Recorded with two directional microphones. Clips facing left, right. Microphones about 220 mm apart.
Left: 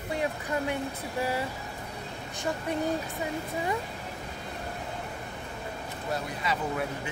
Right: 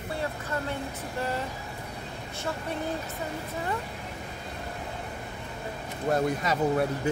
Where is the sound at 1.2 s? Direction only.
10° left (ahead or behind).